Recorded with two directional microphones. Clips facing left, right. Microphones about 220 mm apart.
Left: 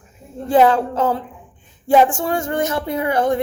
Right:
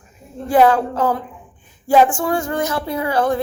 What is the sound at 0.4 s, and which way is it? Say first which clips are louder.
Speech: even; 25° left (ahead or behind).